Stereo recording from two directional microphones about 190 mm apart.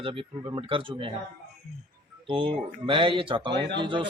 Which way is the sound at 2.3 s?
25° right (ahead or behind).